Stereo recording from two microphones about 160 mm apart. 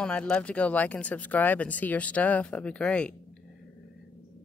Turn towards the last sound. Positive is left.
turn(degrees=5)  # may be behind; listen again after turning